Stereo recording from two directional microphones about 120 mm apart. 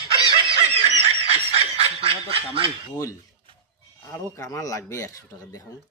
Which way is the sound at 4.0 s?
25° left (ahead or behind).